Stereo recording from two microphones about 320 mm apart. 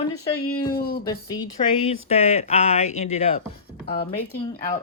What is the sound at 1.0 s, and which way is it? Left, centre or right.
Speech, centre.